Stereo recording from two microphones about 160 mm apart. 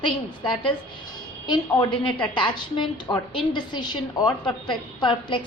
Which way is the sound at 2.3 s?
30° left (ahead or behind).